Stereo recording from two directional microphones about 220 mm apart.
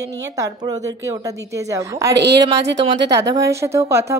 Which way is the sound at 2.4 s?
15° right (ahead or behind).